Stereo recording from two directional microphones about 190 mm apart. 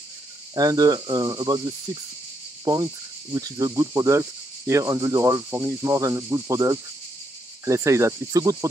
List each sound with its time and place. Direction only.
0.6 s speech: 20° right (ahead or behind)
2.6 s cricket: 20° right (ahead or behind)
3.3 s speech: 15° right (ahead or behind)